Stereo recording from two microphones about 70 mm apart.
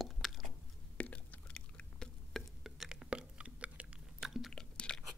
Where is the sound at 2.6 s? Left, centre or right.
Centre.